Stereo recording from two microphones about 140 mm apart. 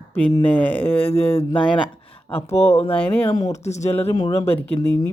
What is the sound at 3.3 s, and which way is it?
Speech, 30° left (ahead or behind).